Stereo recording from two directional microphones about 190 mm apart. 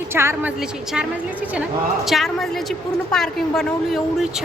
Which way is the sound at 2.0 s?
Centre (ahead or behind).